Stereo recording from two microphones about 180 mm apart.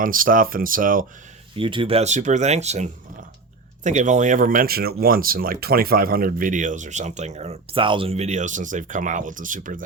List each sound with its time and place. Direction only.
0.0 s speech: 50° right (ahead or behind)
1.5 s speech: 30° right (ahead or behind); by 9.8 s 45° right (ahead or behind)